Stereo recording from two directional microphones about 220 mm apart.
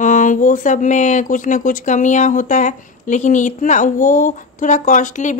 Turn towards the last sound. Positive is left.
turn(degrees=35)  # may be behind; listen again after turning